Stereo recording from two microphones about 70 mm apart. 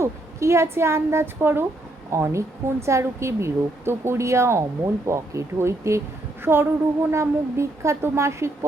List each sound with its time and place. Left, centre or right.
0.0 s a woman's voice: right